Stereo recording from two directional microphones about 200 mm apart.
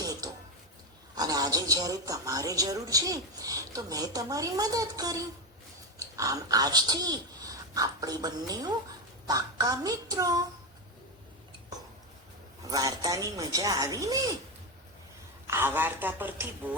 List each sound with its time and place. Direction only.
0.0 s dishes: 15° right (ahead or behind)
1.1 s a man's voice: 20° right (ahead or behind)
12.6 s a man's voice: 20° right (ahead or behind)
15.4 s a man's voice: 10° right (ahead or behind)